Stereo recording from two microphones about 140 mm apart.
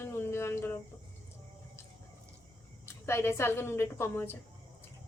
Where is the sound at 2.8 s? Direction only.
20° left (ahead or behind).